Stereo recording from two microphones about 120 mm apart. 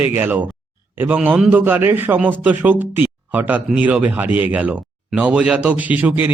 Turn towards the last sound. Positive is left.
turn(degrees=-15)  # may be behind; listen again after turning